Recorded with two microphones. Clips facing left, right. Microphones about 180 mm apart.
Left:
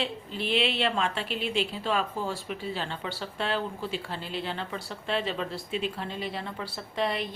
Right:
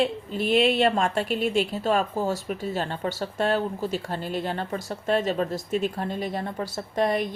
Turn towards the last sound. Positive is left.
turn(degrees=-45)  # may be behind; listen again after turning